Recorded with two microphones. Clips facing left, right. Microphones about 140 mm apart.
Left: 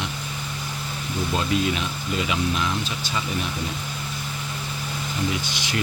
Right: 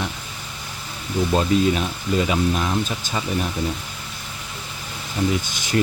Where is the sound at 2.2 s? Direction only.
40° right (ahead or behind).